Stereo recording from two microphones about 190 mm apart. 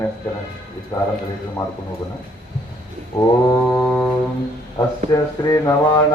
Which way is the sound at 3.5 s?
15° left (ahead or behind).